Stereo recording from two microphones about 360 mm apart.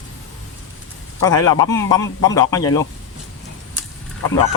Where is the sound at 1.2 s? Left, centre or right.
Centre.